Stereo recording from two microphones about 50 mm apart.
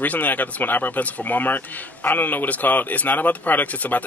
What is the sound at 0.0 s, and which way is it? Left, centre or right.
Speech, left.